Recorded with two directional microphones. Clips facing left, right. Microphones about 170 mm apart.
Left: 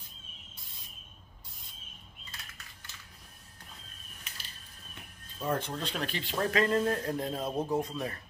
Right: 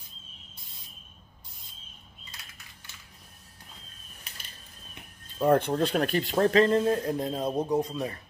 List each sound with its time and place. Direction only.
5.4 s speech: 60° right (ahead or behind); by 8.2 s 15° right (ahead or behind)